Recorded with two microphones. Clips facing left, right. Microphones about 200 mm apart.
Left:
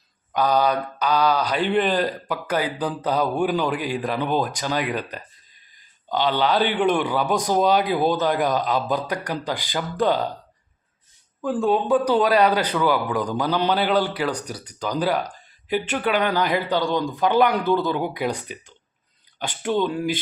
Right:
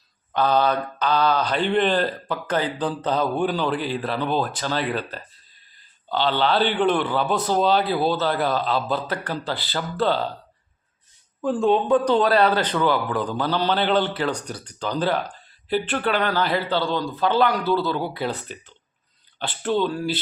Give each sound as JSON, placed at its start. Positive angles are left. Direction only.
{"t": 0.3, "sound": "speech", "side_deg": 10}
{"t": 6.1, "sound": "speech", "side_deg": 15}
{"t": 11.4, "sound": "speech", "side_deg": 0}